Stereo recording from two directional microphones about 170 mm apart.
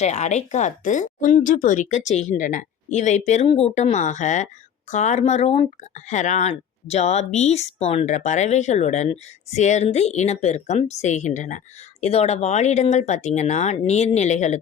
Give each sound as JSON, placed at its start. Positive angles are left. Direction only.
{"t": 0.0, "sound": "speech", "side_deg": 40}